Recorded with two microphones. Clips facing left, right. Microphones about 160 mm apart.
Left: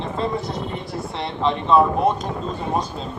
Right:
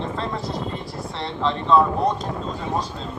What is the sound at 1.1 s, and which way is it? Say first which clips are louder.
Speech: left 2 dB; 15° left (ahead or behind).